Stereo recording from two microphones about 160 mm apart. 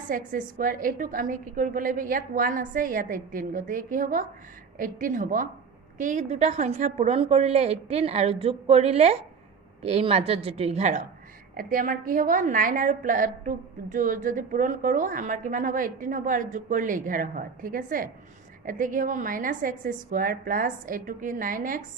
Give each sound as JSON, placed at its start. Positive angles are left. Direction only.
{"t": 0.1, "sound": "a woman's voice", "side_deg": -55}
{"t": 11.5, "sound": "a woman's voice", "side_deg": -60}